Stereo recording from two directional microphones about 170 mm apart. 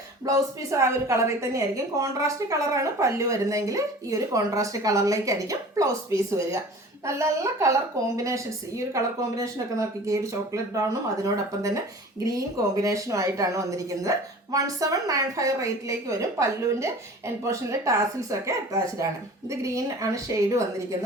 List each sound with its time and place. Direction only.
0.3 s a woman's voice: 20° right (ahead or behind)